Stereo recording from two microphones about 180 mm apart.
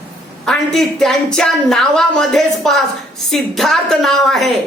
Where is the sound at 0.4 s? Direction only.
Centre (ahead or behind).